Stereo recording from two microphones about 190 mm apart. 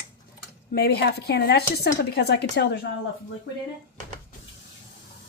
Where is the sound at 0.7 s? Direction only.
55° left (ahead or behind).